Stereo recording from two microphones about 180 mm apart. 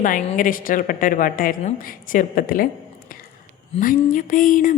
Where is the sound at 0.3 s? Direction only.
50° left (ahead or behind).